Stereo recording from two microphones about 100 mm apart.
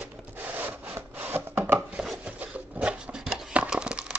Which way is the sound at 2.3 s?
15° right (ahead or behind).